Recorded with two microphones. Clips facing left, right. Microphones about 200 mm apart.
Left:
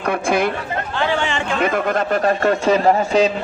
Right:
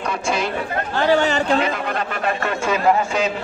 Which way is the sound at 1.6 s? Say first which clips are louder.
Left 4 dB; 50° left (ahead or behind).